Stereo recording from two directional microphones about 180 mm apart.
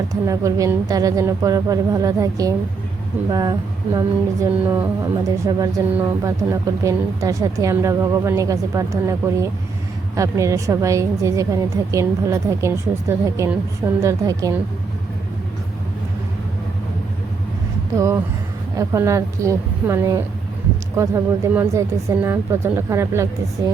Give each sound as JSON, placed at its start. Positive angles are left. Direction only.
{"t": 0.1, "sound": "a woman's voice", "side_deg": -20}
{"t": 5.9, "sound": "a woman's voice", "side_deg": -15}
{"t": 17.9, "sound": "a woman's voice", "side_deg": -15}